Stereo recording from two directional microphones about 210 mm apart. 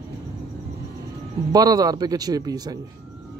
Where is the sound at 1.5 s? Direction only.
20° right (ahead or behind).